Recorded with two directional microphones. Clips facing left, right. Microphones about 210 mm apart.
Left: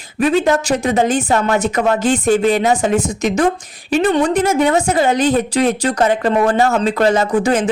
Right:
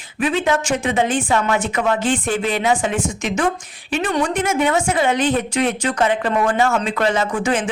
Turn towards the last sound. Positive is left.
turn(degrees=35)  # may be behind; listen again after turning